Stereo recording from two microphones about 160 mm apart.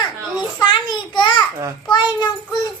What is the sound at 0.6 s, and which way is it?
Child singing, 30° left (ahead or behind).